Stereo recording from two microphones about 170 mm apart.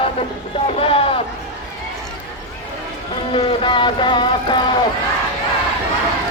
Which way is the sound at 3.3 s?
30° left (ahead or behind).